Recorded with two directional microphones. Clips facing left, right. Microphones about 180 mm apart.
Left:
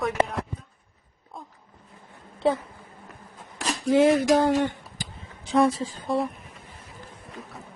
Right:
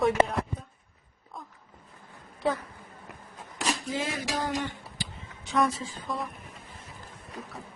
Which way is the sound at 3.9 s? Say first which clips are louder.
Left 13 dB; 60° left (ahead or behind).